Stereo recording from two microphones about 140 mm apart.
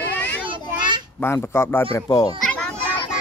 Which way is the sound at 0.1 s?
10° left (ahead or behind).